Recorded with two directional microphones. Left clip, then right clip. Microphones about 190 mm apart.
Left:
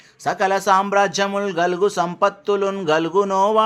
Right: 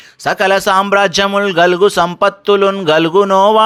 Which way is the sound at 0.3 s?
25° right (ahead or behind).